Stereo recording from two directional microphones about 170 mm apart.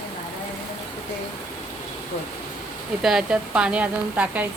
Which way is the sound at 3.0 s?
5° right (ahead or behind).